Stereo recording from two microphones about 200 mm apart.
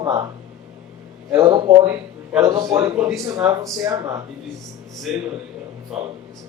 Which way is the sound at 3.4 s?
15° right (ahead or behind).